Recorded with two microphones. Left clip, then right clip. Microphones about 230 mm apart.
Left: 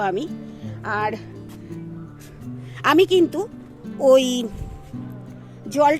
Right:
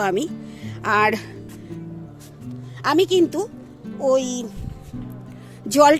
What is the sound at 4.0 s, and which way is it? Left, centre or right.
Speech, left.